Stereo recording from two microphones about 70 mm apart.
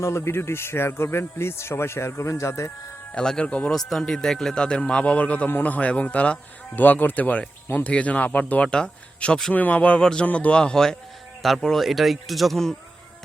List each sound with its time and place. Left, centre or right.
0.2 s speech: left
3.2 s a man's voice: centre
3.8 s a man's voice: centre